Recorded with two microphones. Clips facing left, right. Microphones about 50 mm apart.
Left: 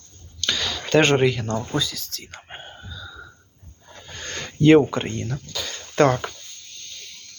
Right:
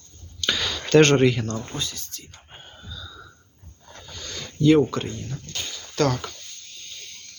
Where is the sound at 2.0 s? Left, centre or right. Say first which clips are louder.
Left 5 dB; left.